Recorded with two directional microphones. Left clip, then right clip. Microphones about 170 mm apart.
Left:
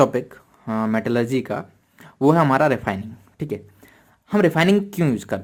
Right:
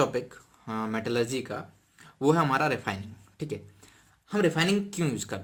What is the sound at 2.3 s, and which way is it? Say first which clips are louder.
Speech: left 8 dB; 35° left (ahead or behind).